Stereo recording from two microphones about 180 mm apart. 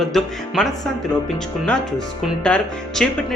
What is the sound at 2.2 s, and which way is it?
Speech, 5° left (ahead or behind).